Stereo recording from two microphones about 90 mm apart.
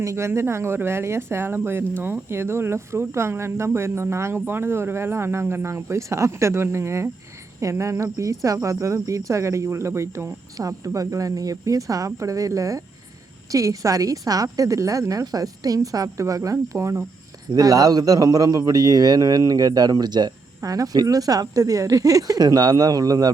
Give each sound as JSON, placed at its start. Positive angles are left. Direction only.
{"t": 0.0, "sound": "a man's voice", "side_deg": -35}
{"t": 20.6, "sound": "a man's voice", "side_deg": -40}